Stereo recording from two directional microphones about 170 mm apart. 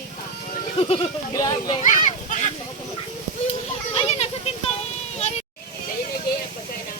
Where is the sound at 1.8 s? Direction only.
50° left (ahead or behind).